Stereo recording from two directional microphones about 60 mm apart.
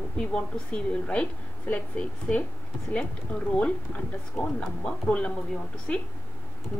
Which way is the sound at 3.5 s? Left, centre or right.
Left.